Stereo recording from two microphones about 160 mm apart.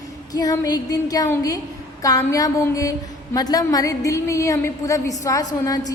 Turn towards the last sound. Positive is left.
turn(degrees=20)  # may be behind; listen again after turning